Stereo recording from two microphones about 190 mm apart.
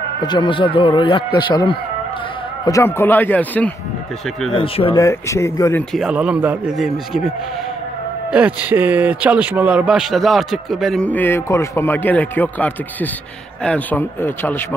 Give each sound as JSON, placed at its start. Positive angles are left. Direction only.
{"t": 0.2, "sound": "a man's voice", "side_deg": 20}
{"t": 4.6, "sound": "speech", "side_deg": 30}
{"t": 5.0, "sound": "a man's voice", "side_deg": 15}
{"t": 5.9, "sound": "a man's voice", "side_deg": -5}